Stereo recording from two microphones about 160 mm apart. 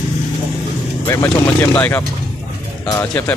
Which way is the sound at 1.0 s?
15° left (ahead or behind).